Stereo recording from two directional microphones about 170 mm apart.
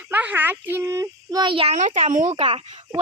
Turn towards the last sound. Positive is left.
turn(degrees=-35)  # may be behind; listen again after turning